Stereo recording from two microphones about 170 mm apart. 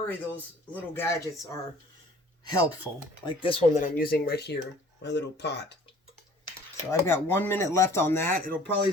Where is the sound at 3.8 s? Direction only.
60° left (ahead or behind); by 4.6 s 75° left (ahead or behind).